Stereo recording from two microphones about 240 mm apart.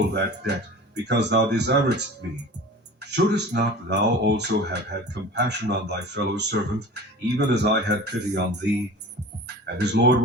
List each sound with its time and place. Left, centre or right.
0.1 s speech: right
9.6 s speech: right